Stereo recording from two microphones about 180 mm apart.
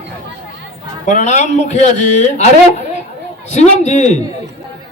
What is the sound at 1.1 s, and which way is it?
A man's voice, 40° left (ahead or behind).